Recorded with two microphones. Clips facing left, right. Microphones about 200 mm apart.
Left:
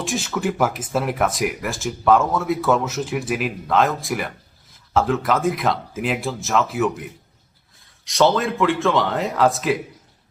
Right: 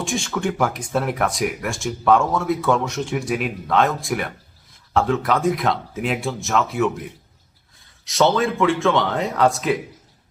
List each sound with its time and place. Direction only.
0.0 s speech: centre (ahead or behind)